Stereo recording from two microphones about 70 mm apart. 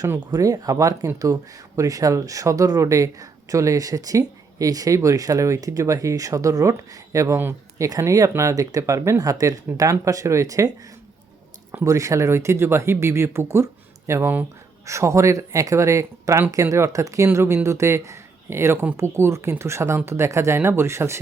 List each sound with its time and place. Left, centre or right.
0.3 s speech: right
11.8 s speech: right
17.3 s speech: right